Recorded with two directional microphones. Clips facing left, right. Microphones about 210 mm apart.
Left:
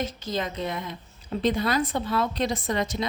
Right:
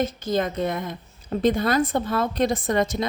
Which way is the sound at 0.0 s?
50° right (ahead or behind).